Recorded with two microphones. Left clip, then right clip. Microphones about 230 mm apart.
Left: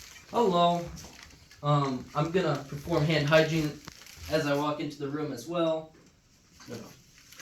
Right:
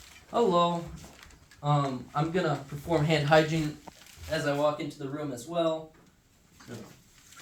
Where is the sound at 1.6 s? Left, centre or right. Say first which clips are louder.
Left 1 dB; centre.